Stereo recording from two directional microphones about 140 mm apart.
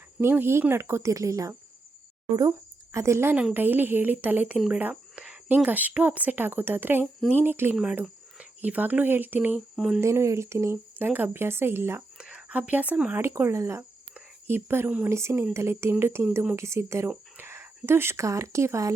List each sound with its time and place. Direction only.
0.2 s speech: 15° right (ahead or behind)
2.9 s speech: 20° right (ahead or behind)
9.6 s a sound: 5° right (ahead or behind)
10.0 s speech: 20° right (ahead or behind)
12.1 s speech: 5° right (ahead or behind); by 18.9 s 20° right (ahead or behind)